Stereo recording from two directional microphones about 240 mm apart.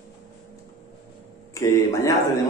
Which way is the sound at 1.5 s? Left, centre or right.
Centre.